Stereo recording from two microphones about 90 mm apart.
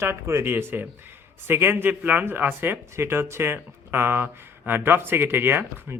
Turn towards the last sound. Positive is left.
turn(degrees=-25)  # may be behind; listen again after turning